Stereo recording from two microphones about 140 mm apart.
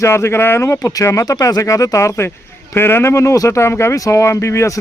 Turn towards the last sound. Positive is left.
turn(degrees=20)  # may be behind; listen again after turning